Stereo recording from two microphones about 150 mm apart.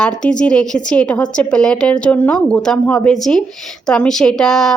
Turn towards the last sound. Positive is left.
turn(degrees=5)  # may be behind; listen again after turning